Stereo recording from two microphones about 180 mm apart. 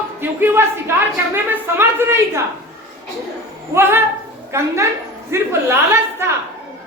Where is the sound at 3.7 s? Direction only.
15° right (ahead or behind).